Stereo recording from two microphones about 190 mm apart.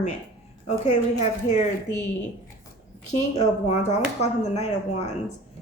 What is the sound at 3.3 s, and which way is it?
A woman's voice, 35° left (ahead or behind).